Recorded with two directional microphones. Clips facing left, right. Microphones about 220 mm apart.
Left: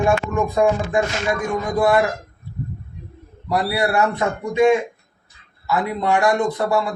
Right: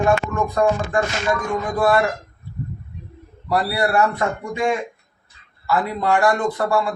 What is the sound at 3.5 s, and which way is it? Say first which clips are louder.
Speech: even; 20° left (ahead or behind).